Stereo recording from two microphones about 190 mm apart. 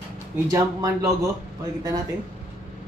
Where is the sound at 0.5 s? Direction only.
15° right (ahead or behind).